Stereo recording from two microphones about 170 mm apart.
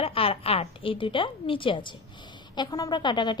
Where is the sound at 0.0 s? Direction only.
35° left (ahead or behind).